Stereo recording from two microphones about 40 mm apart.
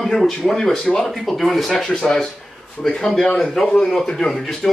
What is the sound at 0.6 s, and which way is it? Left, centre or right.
Speech, centre.